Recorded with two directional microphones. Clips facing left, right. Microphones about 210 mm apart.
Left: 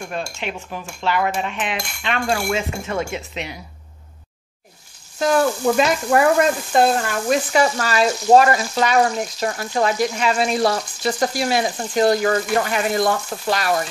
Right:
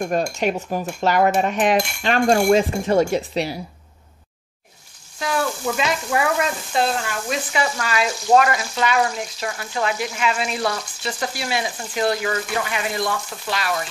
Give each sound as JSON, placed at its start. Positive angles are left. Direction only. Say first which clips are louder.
{"t": 0.0, "sound": "cutlery", "louder": "right 7 dB", "side_deg": -40}
{"t": 5.2, "sound": "frying", "louder": "left 6 dB", "side_deg": 45}